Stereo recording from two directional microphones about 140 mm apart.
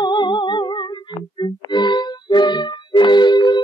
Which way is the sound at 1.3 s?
30° left (ahead or behind).